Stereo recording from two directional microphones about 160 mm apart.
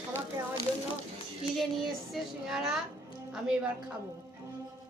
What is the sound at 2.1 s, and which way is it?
Speech, 5° right (ahead or behind).